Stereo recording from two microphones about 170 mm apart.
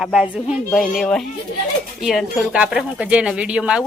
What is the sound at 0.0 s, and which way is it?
Speech, 5° right (ahead or behind).